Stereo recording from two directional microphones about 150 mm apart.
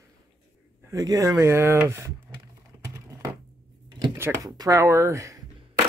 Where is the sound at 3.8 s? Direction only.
30° right (ahead or behind).